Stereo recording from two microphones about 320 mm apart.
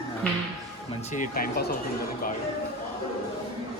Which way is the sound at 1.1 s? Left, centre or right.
Left.